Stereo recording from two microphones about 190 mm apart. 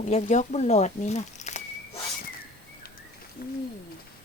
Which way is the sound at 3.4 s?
50° left (ahead or behind).